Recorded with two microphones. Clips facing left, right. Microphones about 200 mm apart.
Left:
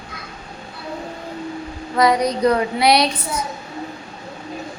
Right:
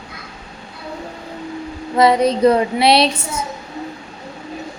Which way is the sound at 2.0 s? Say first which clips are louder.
Right 4 dB; 25° right (ahead or behind).